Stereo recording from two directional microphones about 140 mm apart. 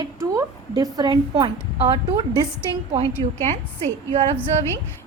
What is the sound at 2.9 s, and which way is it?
A woman's voice, 45° right (ahead or behind).